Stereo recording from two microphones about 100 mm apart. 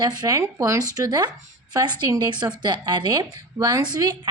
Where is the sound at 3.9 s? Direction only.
45° right (ahead or behind).